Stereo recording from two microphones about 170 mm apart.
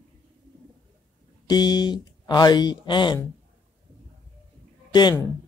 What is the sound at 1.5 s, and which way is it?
Speech, 25° left (ahead or behind).